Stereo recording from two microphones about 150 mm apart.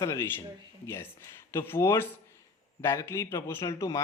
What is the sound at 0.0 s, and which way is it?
Speech, 20° left (ahead or behind).